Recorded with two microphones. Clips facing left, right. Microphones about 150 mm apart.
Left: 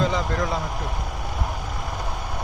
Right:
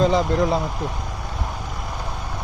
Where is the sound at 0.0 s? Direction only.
35° right (ahead or behind).